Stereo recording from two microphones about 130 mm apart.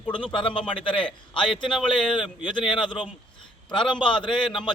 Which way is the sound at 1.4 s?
5° left (ahead or behind).